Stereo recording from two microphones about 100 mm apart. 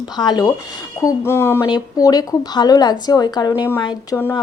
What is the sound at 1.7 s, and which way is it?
A woman's voice, 40° left (ahead or behind).